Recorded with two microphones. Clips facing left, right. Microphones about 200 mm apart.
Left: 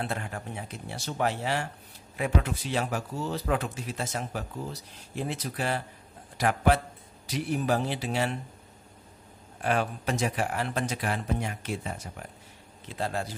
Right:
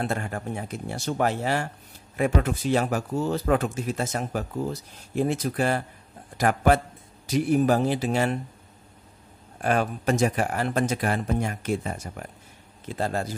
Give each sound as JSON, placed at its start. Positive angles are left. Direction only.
{"t": 0.0, "sound": "a man's voice", "side_deg": -45}
{"t": 9.6, "sound": "speech", "side_deg": -45}